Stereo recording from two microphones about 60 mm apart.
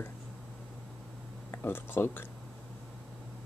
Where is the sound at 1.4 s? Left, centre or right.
Left.